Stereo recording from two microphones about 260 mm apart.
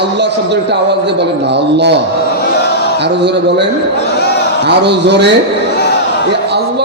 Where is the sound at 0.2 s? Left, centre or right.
Right.